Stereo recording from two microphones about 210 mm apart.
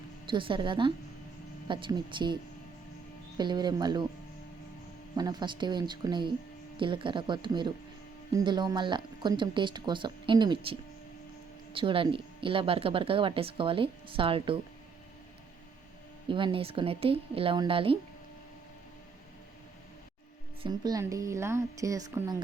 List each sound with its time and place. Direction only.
0.3 s speech: 25° right (ahead or behind)
5.1 s speech: 20° right (ahead or behind)
16.3 s speech: 25° right (ahead or behind)
20.6 s a woman's voice: 20° right (ahead or behind)